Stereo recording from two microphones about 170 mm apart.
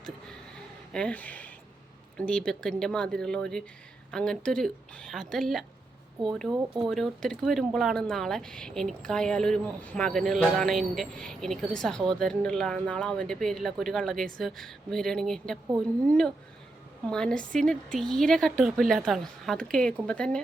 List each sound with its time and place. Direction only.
0.9 s speech: 10° left (ahead or behind)
6.5 s speech: 20° right (ahead or behind)
6.8 s speech: centre (ahead or behind)
17.1 s speech: 5° left (ahead or behind)